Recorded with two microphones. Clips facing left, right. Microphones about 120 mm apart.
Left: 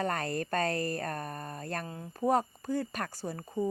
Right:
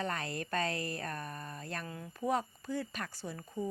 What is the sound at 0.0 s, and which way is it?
Speech, 45° left (ahead or behind).